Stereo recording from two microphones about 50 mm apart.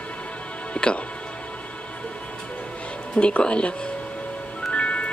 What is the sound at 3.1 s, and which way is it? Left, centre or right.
Speech, centre.